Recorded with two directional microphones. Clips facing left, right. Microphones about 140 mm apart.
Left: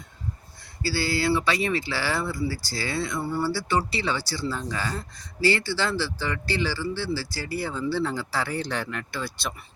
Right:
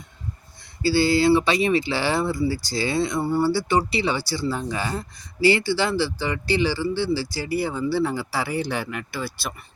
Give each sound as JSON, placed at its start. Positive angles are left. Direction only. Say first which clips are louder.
{"t": 0.8, "sound": "speech", "louder": "right 7 dB", "side_deg": -20}